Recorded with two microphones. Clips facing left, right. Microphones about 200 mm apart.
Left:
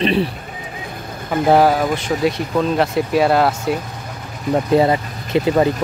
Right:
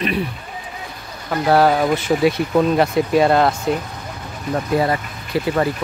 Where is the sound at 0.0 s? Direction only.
30° left (ahead or behind).